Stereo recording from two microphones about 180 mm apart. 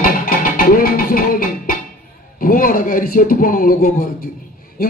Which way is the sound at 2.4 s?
50° left (ahead or behind).